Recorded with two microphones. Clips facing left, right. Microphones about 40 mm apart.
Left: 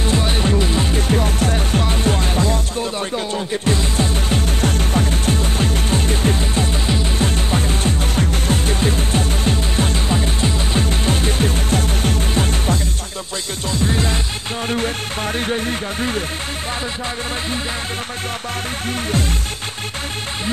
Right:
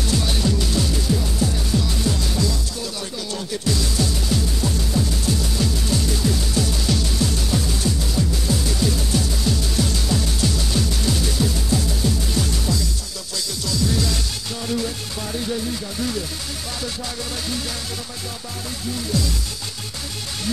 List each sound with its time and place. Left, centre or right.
0.0 s music: left
3.6 s music: left